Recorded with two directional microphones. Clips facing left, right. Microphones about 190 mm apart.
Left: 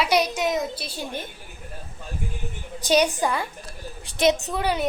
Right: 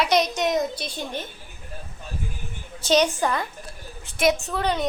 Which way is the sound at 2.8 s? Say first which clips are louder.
Even; 15° left (ahead or behind).